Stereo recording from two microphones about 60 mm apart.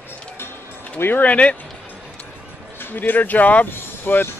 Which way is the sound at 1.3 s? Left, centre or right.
Left.